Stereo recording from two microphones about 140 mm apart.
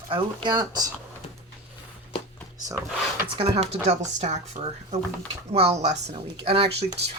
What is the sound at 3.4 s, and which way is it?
Speech, 50° right (ahead or behind).